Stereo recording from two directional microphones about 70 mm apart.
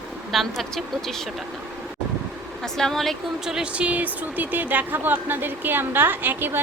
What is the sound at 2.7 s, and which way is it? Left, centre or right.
Speech, centre.